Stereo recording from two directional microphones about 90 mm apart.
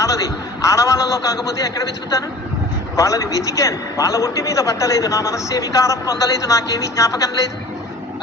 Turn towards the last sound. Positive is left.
turn(degrees=35)  # may be behind; listen again after turning